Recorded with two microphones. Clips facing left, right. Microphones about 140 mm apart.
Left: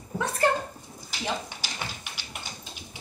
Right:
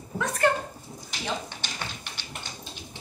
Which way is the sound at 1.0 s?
10° left (ahead or behind).